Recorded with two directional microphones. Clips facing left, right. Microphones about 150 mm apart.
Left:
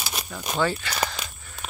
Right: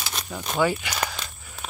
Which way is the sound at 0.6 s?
15° right (ahead or behind).